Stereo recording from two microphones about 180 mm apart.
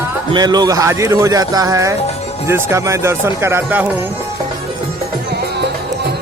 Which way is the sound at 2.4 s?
15° right (ahead or behind).